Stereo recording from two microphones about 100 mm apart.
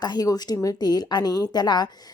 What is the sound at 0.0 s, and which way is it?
A woman's voice, 40° left (ahead or behind).